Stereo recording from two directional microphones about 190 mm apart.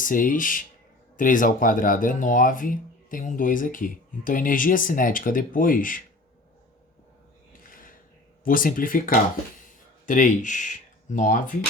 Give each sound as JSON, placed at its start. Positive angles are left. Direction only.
{"t": 0.0, "sound": "speech", "side_deg": 45}
{"t": 7.7, "sound": "a sound", "side_deg": 45}
{"t": 8.4, "sound": "speech", "side_deg": 45}